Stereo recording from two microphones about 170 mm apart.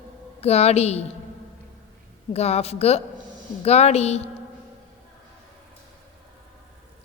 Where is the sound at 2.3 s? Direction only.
40° left (ahead or behind).